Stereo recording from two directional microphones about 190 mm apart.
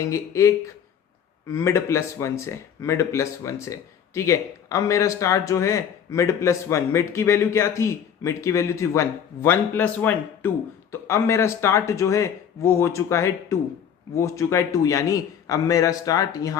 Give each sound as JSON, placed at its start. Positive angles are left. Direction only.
{"t": 0.0, "sound": "speech", "side_deg": 15}